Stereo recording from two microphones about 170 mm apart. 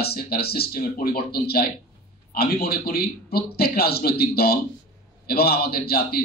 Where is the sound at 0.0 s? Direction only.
65° left (ahead or behind).